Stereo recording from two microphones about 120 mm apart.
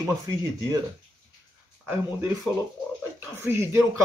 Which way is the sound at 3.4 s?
25° right (ahead or behind).